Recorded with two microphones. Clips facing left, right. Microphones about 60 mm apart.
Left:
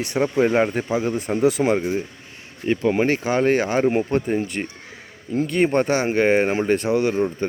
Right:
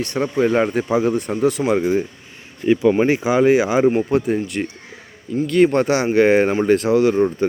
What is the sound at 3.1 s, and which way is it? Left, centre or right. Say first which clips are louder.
Speech: right 4 dB; centre.